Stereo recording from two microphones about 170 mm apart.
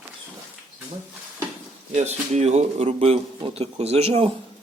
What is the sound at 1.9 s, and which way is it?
A man's voice, 40° right (ahead or behind).